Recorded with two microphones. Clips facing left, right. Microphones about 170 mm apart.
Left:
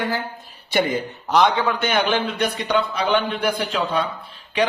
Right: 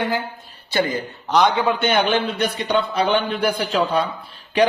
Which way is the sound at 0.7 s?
20° left (ahead or behind).